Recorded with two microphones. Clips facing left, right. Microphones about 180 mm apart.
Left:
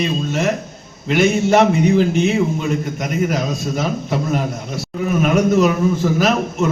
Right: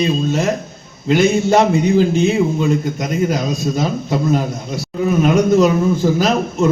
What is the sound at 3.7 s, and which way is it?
A man's voice, 30° right (ahead or behind).